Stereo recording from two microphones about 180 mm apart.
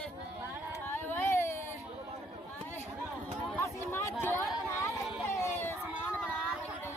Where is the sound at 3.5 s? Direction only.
15° left (ahead or behind).